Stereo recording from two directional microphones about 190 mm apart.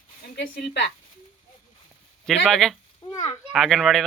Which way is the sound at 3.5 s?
Centre (ahead or behind).